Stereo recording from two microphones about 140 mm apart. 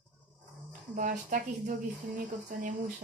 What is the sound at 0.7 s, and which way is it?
Speech, 75° right (ahead or behind).